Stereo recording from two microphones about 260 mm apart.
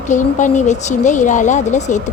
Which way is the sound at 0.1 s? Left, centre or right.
Left.